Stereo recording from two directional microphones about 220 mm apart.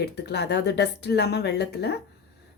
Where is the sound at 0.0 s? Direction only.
50° left (ahead or behind).